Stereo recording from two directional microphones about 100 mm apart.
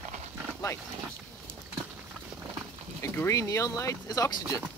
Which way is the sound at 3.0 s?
25° left (ahead or behind).